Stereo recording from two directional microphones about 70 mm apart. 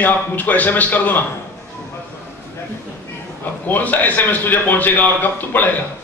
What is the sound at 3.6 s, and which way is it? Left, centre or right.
A man's voice, left.